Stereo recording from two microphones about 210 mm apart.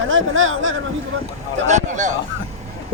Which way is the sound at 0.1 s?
70° right (ahead or behind).